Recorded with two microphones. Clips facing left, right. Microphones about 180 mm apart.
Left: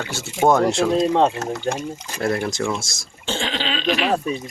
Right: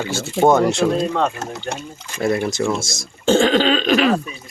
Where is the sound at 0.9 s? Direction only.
25° left (ahead or behind).